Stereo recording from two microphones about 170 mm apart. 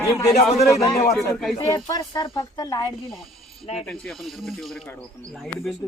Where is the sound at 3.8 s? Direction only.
5° left (ahead or behind).